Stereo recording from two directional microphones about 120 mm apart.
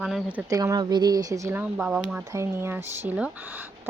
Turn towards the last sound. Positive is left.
turn(degrees=-15)  # may be behind; listen again after turning